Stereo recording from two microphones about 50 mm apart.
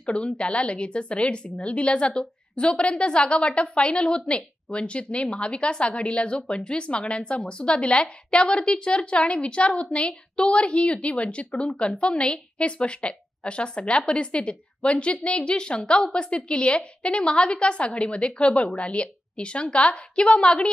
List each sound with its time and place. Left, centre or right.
0.0 s a woman's voice: left